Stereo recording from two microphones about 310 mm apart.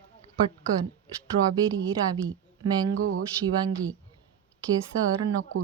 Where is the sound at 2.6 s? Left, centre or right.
Right.